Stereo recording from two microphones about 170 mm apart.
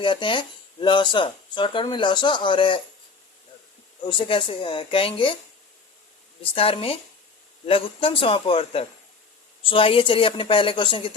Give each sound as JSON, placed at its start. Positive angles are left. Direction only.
{"t": 0.0, "sound": "speech", "side_deg": 30}
{"t": 4.0, "sound": "a woman's voice", "side_deg": 30}
{"t": 6.4, "sound": "a woman's voice", "side_deg": 35}